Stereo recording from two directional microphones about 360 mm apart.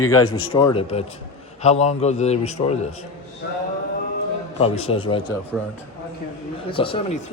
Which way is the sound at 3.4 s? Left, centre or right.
Left.